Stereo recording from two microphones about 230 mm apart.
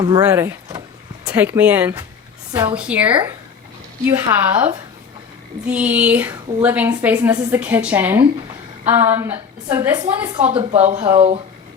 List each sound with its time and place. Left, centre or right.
0.0 s a woman's voice: centre
10.5 s speech: right